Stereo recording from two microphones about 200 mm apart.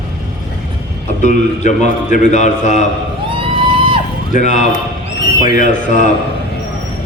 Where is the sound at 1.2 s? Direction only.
35° left (ahead or behind).